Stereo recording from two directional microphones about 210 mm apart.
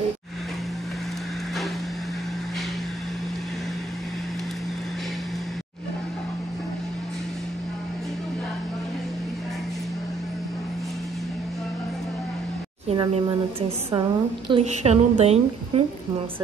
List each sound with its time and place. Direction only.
12.8 s a woman's voice: 25° right (ahead or behind)